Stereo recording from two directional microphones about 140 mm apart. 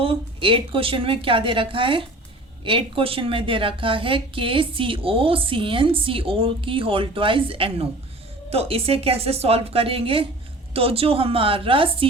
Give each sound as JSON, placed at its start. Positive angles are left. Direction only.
{"t": 0.0, "sound": "a woman's voice", "side_deg": -40}